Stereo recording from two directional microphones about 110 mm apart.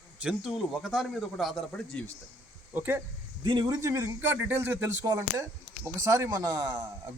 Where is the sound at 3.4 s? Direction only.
40° right (ahead or behind); by 4.9 s 20° right (ahead or behind).